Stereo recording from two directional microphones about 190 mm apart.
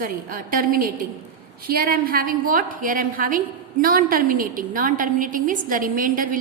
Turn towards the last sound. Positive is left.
turn(degrees=-45)  # may be behind; listen again after turning